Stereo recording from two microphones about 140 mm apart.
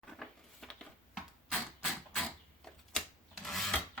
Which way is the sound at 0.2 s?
Centre (ahead or behind).